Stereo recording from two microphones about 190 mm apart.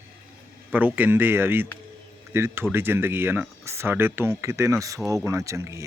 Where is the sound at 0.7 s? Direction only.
10° right (ahead or behind).